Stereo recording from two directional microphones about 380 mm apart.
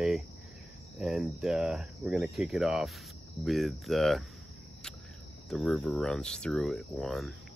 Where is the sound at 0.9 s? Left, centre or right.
Centre.